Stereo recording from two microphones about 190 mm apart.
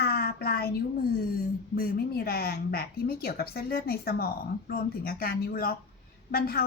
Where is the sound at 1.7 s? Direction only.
50° left (ahead or behind).